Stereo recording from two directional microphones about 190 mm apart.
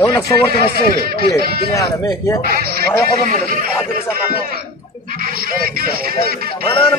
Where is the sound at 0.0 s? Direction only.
15° left (ahead or behind).